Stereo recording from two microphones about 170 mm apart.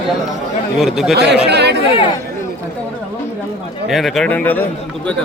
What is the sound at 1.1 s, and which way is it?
Speech, 80° right.